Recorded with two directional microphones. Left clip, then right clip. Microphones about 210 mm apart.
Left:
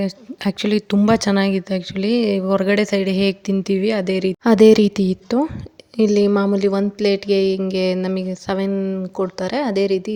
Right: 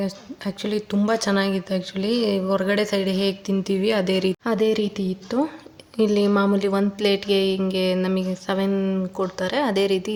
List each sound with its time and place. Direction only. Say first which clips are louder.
0.0 s speech: left 5 dB; 35° left (ahead or behind)
4.5 s speech: left 13 dB; 40° left (ahead or behind); by 10.0 s 25° left (ahead or behind)